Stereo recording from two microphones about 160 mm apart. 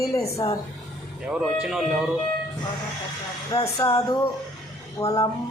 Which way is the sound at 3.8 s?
20° left (ahead or behind).